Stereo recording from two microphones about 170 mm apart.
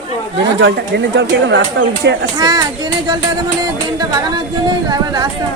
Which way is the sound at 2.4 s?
25° right (ahead or behind).